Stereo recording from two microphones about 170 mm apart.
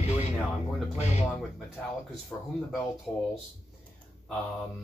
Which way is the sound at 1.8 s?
5° left (ahead or behind).